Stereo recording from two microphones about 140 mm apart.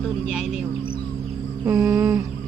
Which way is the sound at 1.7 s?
20° right (ahead or behind).